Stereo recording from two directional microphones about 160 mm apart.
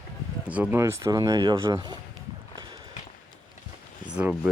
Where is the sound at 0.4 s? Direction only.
10° right (ahead or behind); by 2.0 s 25° right (ahead or behind).